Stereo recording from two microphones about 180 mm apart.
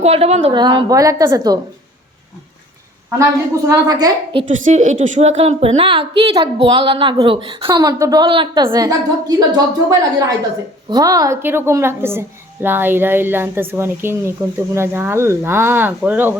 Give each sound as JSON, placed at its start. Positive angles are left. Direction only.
{"t": 0.0, "sound": "a woman's voice", "side_deg": -35}
{"t": 0.5, "sound": "a woman's voice", "side_deg": -25}
{"t": 3.2, "sound": "a woman's voice", "side_deg": -15}
{"t": 4.4, "sound": "a woman's voice", "side_deg": -45}